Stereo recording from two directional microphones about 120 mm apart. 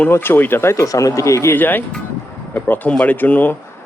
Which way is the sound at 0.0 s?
20° left (ahead or behind).